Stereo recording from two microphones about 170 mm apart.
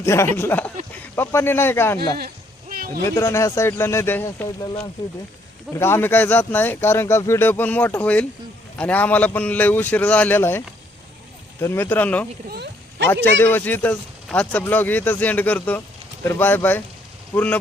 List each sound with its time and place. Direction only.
0.0 s speech: 15° left (ahead or behind)
2.0 s a sound: 65° right (ahead or behind)
3.0 s speech: 15° left (ahead or behind)
5.7 s speech: 15° left (ahead or behind)
11.6 s speech: 15° left (ahead or behind)
12.5 s a sound: 75° right (ahead or behind)
13.2 s speech: 10° left (ahead or behind)